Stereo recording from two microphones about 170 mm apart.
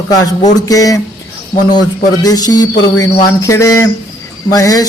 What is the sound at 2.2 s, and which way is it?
A man's voice, 20° left (ahead or behind).